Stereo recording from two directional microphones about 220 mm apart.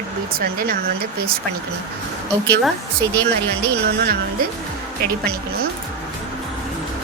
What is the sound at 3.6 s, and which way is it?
Speech, 45° right (ahead or behind).